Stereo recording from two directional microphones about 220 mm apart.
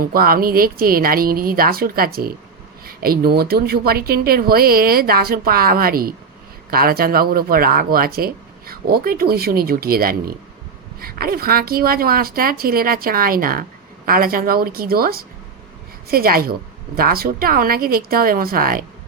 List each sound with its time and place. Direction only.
0.0 s a woman's voice: 40° right (ahead or behind)